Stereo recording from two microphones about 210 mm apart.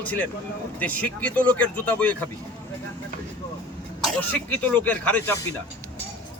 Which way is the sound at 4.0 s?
5° left (ahead or behind).